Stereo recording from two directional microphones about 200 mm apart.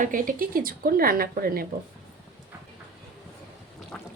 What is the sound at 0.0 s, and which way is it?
A woman's voice, 45° right (ahead or behind).